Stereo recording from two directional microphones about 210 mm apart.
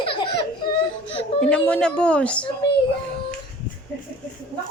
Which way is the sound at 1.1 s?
25° left (ahead or behind).